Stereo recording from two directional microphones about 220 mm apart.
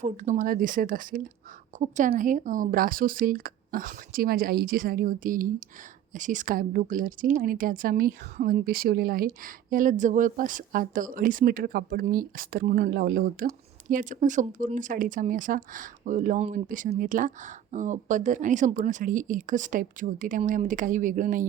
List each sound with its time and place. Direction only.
0.0 s a woman's voice: 35° right (ahead or behind)